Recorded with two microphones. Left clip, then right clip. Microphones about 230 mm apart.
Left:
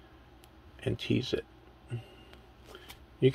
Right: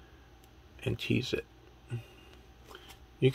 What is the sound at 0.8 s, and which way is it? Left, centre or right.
Speech, centre.